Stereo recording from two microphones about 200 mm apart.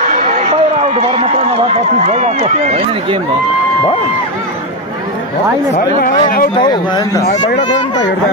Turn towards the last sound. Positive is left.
turn(degrees=20)  # may be behind; listen again after turning